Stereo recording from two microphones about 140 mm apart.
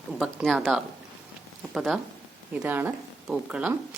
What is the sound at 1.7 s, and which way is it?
Speech, centre (ahead or behind).